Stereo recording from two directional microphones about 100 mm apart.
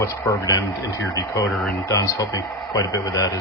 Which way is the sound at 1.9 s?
35° left (ahead or behind).